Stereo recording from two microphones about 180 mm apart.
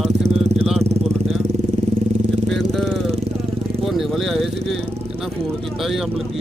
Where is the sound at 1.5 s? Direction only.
40° right (ahead or behind).